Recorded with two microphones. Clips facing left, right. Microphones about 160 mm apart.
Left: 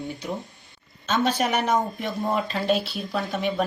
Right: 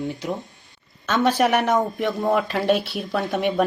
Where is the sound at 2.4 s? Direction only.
60° right (ahead or behind).